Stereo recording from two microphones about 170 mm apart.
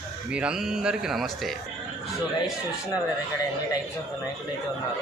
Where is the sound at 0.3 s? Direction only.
5° right (ahead or behind).